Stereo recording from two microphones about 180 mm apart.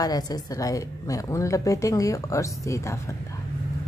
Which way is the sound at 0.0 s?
20° left (ahead or behind).